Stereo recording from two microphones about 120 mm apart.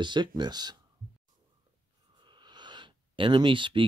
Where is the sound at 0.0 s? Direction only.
40° right (ahead or behind).